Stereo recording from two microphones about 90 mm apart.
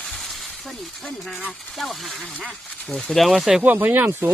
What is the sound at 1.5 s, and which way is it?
Speech, centre (ahead or behind).